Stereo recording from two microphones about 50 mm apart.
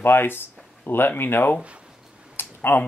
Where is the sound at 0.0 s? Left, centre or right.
Left.